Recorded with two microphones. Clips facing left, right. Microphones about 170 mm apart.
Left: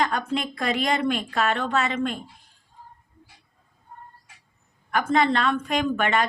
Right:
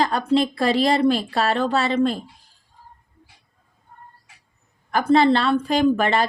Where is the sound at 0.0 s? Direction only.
35° right (ahead or behind).